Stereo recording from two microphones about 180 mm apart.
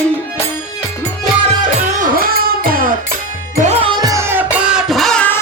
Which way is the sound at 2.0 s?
55° right (ahead or behind).